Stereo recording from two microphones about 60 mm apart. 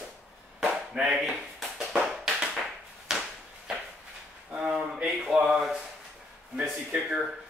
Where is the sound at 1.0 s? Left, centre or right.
Centre.